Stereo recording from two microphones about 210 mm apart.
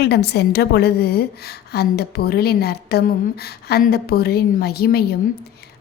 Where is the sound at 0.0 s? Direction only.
50° left (ahead or behind).